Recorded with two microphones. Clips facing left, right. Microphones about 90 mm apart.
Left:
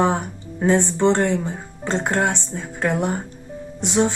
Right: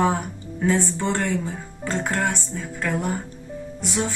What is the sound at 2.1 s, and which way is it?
Music, 40° left (ahead or behind).